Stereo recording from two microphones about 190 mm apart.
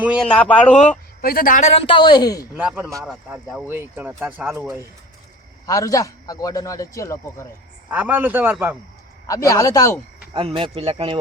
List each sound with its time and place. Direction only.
0.0 s speech: 5° right (ahead or behind)
0.3 s a man's voice: 5° left (ahead or behind)
0.8 s speech: 45° left (ahead or behind); by 2.4 s 20° left (ahead or behind)
2.6 s speech: 5° right (ahead or behind)
5.6 s a man's voice: 20° left (ahead or behind)
7.9 s speech: 10° right (ahead or behind)
9.2 s a man's voice: 15° left (ahead or behind)
10.3 s speech: 30° right (ahead or behind)